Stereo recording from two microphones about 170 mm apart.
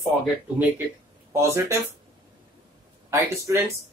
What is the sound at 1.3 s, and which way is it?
Speech, 20° right (ahead or behind).